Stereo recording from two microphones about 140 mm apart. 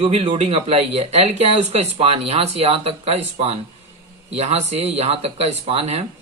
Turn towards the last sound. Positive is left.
turn(degrees=-45)  # may be behind; listen again after turning